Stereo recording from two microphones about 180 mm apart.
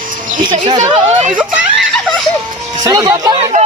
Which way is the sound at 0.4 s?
25° right (ahead or behind).